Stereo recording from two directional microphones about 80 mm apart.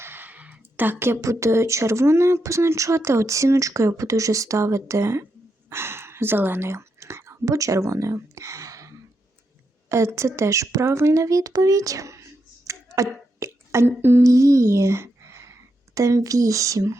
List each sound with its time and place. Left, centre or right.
0.0 s speech: right
9.9 s speech: right